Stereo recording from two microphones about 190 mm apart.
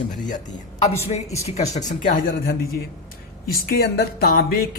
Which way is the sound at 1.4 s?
35° left (ahead or behind).